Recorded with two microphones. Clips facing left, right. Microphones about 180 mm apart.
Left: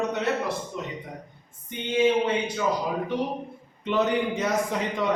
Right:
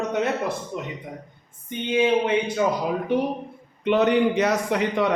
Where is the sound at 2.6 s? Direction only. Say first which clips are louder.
Right 3 dB; 60° right (ahead or behind).